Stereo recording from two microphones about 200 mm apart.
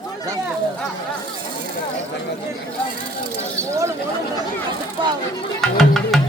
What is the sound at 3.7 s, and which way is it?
Speech, 15° right (ahead or behind).